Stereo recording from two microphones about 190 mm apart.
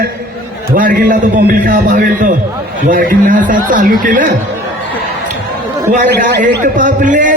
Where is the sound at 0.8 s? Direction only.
50° right (ahead or behind).